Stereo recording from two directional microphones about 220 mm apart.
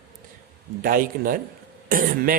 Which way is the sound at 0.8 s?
40° right (ahead or behind).